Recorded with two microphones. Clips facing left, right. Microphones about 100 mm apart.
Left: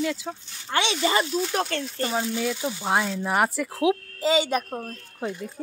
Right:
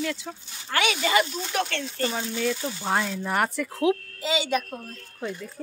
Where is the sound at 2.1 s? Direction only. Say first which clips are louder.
Left 1 dB; 5° left (ahead or behind).